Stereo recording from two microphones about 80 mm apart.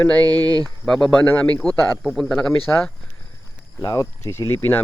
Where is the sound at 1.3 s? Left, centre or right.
Centre.